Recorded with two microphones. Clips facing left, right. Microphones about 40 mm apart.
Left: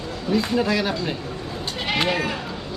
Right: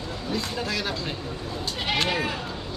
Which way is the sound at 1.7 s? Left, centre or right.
Centre.